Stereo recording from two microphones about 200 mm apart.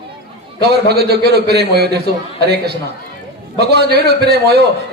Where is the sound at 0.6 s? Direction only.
55° right (ahead or behind).